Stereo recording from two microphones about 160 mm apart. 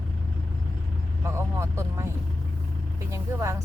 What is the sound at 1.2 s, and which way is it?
Speech, 15° right (ahead or behind).